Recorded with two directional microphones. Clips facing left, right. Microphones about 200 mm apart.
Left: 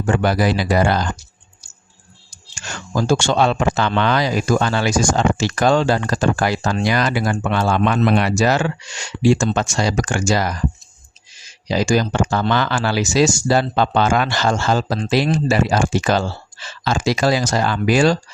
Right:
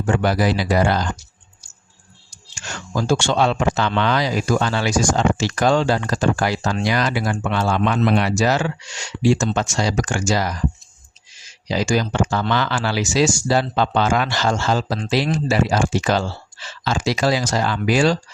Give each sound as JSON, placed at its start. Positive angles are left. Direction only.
{"t": 0.1, "sound": "speech", "side_deg": 50}
{"t": 2.6, "sound": "speech", "side_deg": 45}
{"t": 11.7, "sound": "speech", "side_deg": 45}